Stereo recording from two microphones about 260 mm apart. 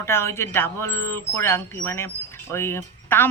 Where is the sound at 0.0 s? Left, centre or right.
Centre.